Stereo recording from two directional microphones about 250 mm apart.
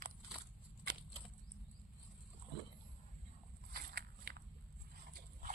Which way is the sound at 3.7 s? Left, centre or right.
Right.